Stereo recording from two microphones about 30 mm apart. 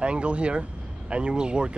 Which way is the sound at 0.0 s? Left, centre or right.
Right.